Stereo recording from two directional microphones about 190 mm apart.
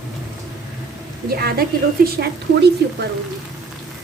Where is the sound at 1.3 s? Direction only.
55° right (ahead or behind).